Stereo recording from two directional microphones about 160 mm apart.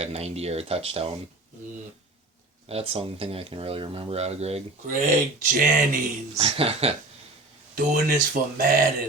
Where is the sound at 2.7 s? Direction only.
40° right (ahead or behind).